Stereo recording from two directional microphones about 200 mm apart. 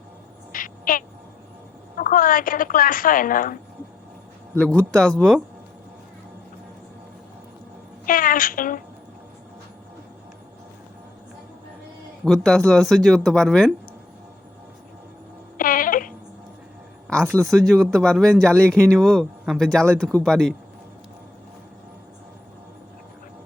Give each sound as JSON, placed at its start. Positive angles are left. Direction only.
{"t": 0.5, "sound": "a woman's voice", "side_deg": 45}
{"t": 4.6, "sound": "speech", "side_deg": 5}
{"t": 8.0, "sound": "a woman's voice", "side_deg": 45}
{"t": 12.2, "sound": "speech", "side_deg": 5}
{"t": 15.5, "sound": "music", "side_deg": 45}
{"t": 17.3, "sound": "speech", "side_deg": 0}